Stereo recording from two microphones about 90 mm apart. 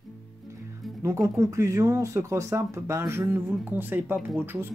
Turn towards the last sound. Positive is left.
turn(degrees=-25)  # may be behind; listen again after turning